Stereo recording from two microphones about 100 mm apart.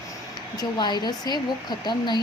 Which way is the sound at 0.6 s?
45° left (ahead or behind).